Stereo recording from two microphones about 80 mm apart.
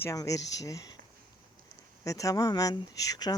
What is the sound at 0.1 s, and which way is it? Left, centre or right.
Speech, left.